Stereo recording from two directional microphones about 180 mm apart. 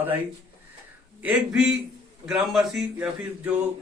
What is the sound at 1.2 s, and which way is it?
Speech, 5° right (ahead or behind).